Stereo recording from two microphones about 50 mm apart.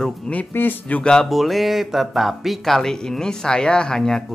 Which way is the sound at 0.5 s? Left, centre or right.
Left.